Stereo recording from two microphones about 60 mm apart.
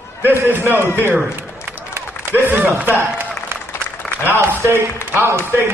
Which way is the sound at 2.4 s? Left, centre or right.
Right.